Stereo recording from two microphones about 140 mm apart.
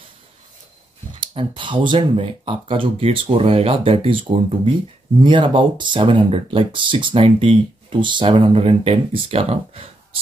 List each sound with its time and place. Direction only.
1.2 s speech: 35° right (ahead or behind)